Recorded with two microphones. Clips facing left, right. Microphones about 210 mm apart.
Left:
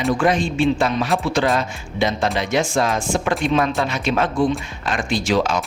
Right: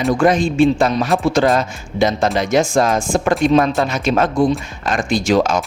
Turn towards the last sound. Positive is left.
turn(degrees=-45)  # may be behind; listen again after turning